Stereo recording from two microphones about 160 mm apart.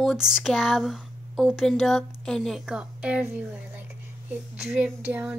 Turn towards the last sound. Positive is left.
turn(degrees=-10)  # may be behind; listen again after turning